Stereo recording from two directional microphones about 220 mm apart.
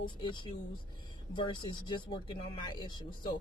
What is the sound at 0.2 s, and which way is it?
Speech, 20° left (ahead or behind).